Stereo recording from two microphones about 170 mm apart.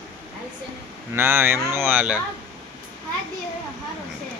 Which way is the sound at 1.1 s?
15° right (ahead or behind).